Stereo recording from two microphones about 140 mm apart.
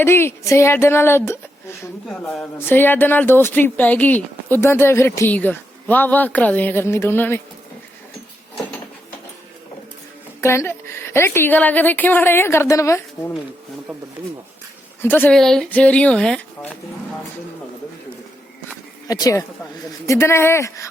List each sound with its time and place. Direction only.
0.0 s a woman's voice: 15° left (ahead or behind)
10.4 s a woman's voice: 20° left (ahead or behind)
15.0 s a woman's voice: 15° left (ahead or behind)
19.0 s speech: 25° left (ahead or behind)